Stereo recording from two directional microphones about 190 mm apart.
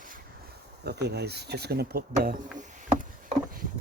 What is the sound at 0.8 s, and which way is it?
Speech, 60° right (ahead or behind).